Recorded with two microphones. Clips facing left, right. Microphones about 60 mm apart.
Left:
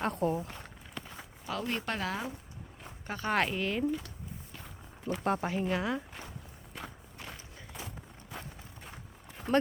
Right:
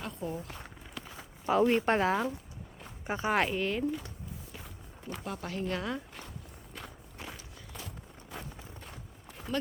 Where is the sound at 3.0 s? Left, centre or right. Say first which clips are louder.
Right 3 dB; centre.